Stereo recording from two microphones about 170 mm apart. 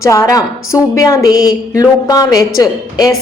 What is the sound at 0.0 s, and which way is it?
A woman's voice, 20° left (ahead or behind).